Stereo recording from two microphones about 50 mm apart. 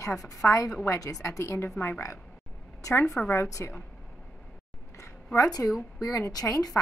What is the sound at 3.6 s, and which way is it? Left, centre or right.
Speech, left.